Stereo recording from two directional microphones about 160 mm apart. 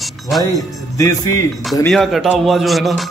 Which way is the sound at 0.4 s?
20° left (ahead or behind).